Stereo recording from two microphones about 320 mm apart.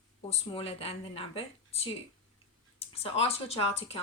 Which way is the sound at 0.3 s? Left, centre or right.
Centre.